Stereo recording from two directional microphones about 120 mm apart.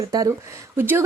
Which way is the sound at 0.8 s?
20° right (ahead or behind).